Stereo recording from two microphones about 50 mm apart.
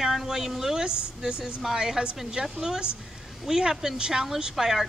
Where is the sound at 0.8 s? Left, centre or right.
Centre.